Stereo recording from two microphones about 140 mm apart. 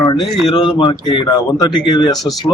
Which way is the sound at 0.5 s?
35° left (ahead or behind).